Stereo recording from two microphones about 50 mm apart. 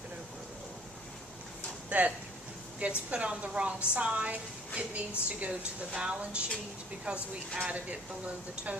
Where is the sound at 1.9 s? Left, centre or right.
Right.